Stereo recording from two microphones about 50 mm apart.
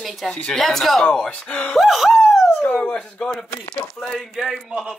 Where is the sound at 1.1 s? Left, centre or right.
Centre.